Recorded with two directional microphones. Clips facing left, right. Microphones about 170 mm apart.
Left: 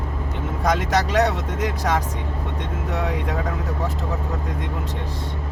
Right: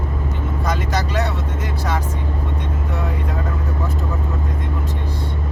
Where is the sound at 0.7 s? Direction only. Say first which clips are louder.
Left 3 dB; 80° left.